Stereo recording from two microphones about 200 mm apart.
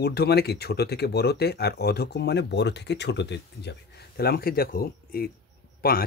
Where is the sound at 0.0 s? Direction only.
55° left (ahead or behind).